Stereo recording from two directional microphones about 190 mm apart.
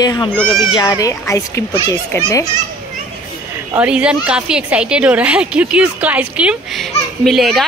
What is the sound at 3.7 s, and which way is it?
A woman's voice, 5° right (ahead or behind).